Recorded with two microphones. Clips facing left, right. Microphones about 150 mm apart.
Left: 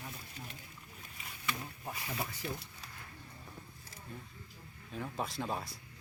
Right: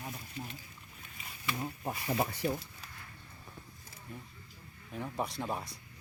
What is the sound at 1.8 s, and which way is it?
Speech, 40° right (ahead or behind).